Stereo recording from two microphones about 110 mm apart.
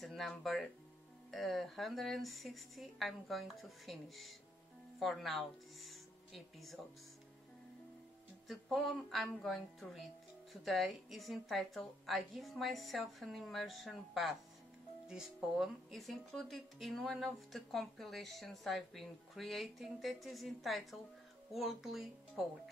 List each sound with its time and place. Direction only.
0.0 s speech: centre (ahead or behind)
8.5 s speech: centre (ahead or behind)